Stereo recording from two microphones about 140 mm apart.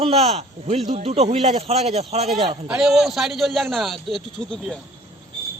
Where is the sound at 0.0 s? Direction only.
45° right (ahead or behind).